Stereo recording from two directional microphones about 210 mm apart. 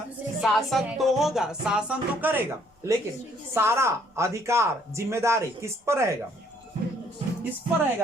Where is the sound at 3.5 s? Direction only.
10° right (ahead or behind).